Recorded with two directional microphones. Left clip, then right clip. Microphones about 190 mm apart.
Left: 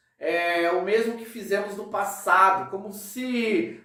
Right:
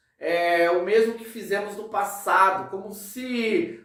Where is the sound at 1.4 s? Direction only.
10° right (ahead or behind).